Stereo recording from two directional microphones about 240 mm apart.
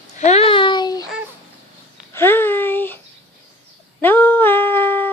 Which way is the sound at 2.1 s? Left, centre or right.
Centre.